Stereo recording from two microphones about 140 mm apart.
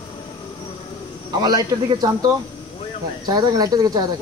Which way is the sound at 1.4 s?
30° right (ahead or behind).